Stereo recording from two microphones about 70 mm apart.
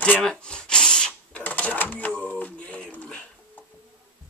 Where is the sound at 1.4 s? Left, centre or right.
Left.